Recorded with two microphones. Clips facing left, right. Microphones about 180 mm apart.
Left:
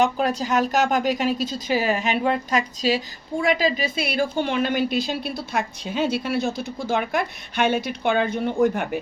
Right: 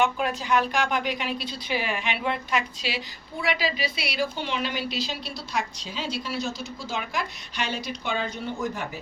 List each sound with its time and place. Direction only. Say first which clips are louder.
0.0 s a woman's voice: left 4 dB; 40° left (ahead or behind); by 9.0 s 55° left (ahead or behind)